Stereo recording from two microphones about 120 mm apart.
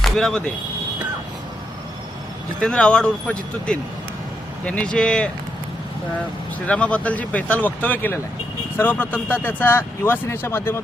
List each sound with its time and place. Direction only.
0.0 s speech: 5° left (ahead or behind)
2.6 s speech: 10° left (ahead or behind)
6.7 s speech: 10° left (ahead or behind)